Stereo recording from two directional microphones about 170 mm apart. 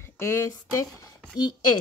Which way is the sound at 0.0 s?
15° left (ahead or behind).